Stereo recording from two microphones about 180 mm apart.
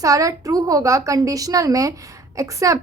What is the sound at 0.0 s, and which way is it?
A woman's voice, 20° right (ahead or behind).